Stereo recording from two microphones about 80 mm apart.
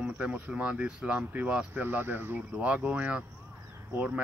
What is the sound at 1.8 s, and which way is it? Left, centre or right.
Speech, right.